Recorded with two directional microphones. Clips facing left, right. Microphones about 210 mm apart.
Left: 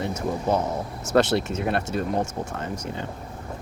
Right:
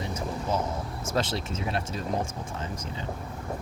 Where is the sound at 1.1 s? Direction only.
65° left (ahead or behind).